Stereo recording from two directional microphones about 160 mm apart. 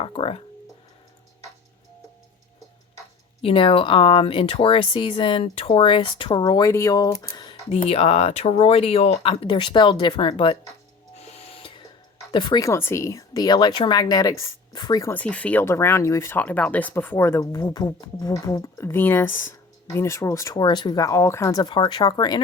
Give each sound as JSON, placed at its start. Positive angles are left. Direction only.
{"t": 0.0, "sound": "speech", "side_deg": 40}
{"t": 3.4, "sound": "speech", "side_deg": 35}
{"t": 7.9, "sound": "speech", "side_deg": 40}
{"t": 11.2, "sound": "a sound", "side_deg": 40}
{"t": 12.3, "sound": "speech", "side_deg": 30}
{"t": 15.1, "sound": "speech", "side_deg": 10}